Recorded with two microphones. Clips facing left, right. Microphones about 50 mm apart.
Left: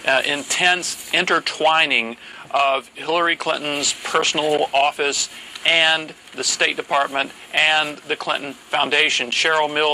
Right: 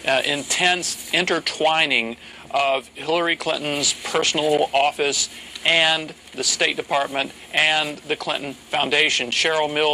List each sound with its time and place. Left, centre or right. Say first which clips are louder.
0.0 s speech: left 2 dB; left